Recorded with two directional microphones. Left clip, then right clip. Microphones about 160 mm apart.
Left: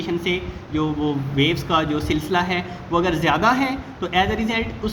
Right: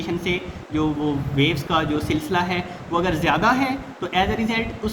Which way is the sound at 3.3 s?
30° left (ahead or behind).